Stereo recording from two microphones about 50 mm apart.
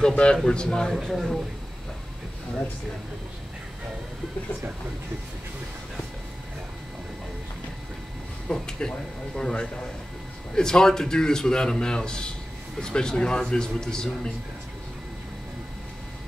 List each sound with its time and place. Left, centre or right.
0.0 s a man's voice: centre
0.9 s speech: centre
8.5 s a man's voice: centre